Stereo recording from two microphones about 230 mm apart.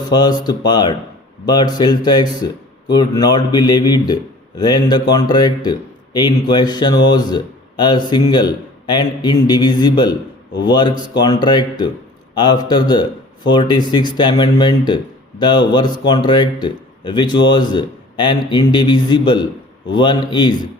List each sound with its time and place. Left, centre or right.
0.1 s speech: centre